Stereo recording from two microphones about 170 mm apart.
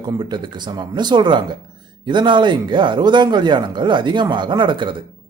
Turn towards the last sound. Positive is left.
turn(degrees=-30)  # may be behind; listen again after turning